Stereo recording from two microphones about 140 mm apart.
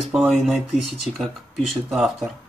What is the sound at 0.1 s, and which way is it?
Speech, 5° right (ahead or behind).